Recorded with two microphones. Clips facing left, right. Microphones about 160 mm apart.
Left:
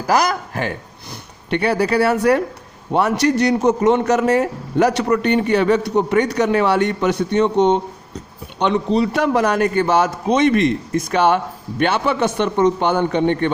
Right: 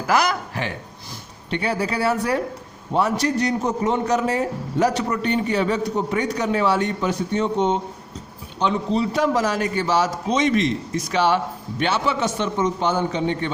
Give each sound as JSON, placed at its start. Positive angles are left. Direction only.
{"t": 0.1, "sound": "speech", "side_deg": 40}
{"t": 1.5, "sound": "a man's voice", "side_deg": 65}